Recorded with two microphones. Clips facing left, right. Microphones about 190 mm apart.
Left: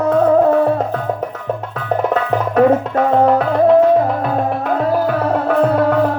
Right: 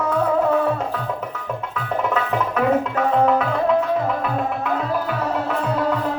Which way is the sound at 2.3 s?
40° left (ahead or behind).